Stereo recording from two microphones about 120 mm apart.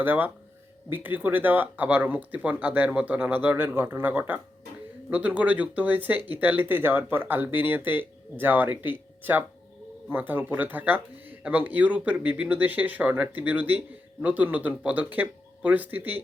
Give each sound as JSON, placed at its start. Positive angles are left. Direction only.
{"t": 0.0, "sound": "speech", "side_deg": -15}